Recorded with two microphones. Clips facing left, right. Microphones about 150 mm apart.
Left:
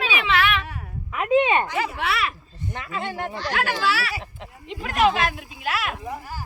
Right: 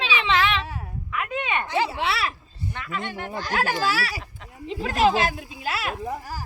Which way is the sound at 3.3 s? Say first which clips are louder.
Right 2 dB; 45° right (ahead or behind).